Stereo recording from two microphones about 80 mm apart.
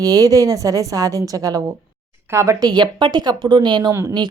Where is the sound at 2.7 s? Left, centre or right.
Right.